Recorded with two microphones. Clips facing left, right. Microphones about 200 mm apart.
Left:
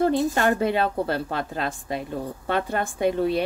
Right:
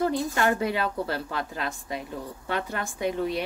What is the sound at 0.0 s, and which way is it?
A woman's voice, 30° left (ahead or behind).